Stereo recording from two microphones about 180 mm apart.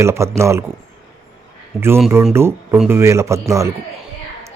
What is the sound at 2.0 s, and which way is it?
A man's voice, 5° right (ahead or behind).